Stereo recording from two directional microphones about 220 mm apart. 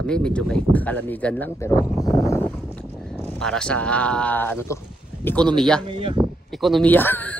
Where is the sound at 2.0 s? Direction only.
15° left (ahead or behind).